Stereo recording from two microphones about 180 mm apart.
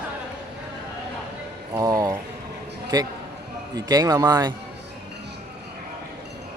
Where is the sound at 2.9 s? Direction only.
20° right (ahead or behind).